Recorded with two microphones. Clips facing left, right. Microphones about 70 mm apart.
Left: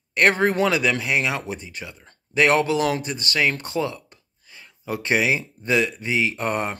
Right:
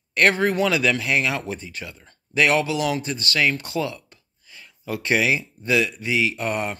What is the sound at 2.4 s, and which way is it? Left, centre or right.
Speech, left.